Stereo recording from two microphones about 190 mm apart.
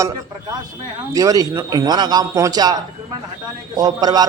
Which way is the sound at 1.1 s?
20° right (ahead or behind).